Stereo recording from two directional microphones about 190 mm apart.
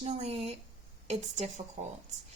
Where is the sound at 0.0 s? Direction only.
35° right (ahead or behind).